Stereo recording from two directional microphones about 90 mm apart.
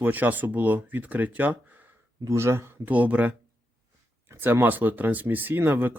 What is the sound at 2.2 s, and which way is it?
Speech, 30° right (ahead or behind).